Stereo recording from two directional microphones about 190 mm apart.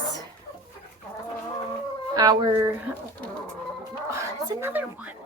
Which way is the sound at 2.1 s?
20° right (ahead or behind).